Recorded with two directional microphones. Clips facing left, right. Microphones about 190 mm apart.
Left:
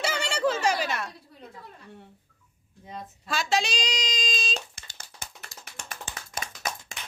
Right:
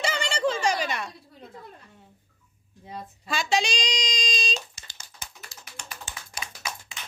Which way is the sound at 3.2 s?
Centre (ahead or behind).